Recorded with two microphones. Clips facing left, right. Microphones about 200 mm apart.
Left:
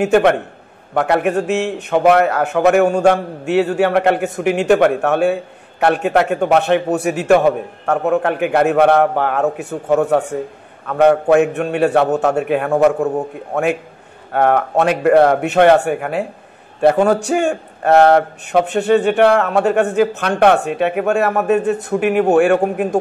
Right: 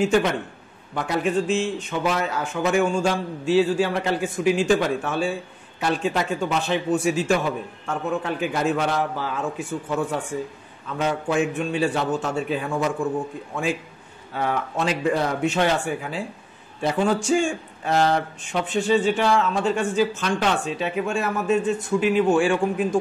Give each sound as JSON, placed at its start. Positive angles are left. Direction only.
{"t": 0.0, "sound": "a man's voice", "side_deg": 65}